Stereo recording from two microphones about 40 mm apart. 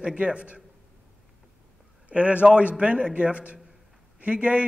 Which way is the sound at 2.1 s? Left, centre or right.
Right.